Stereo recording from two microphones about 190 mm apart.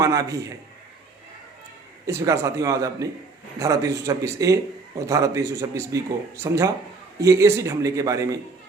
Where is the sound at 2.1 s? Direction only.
15° right (ahead or behind).